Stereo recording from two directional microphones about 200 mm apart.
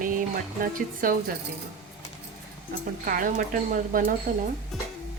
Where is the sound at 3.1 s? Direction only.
45° right (ahead or behind).